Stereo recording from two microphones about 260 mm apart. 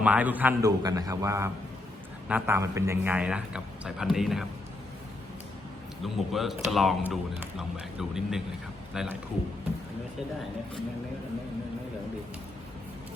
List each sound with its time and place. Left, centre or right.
0.0 s a man's voice: centre
6.0 s a man's voice: centre